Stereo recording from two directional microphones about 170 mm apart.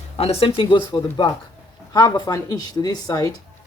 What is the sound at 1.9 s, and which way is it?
Speech, 25° left (ahead or behind).